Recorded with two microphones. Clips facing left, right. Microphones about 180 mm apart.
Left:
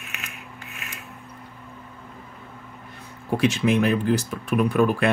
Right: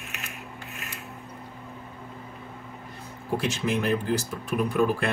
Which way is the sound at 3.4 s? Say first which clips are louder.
Left 8 dB; 65° left (ahead or behind).